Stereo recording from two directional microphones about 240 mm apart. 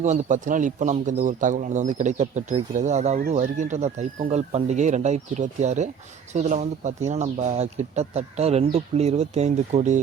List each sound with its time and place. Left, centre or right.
0.0 s speech: right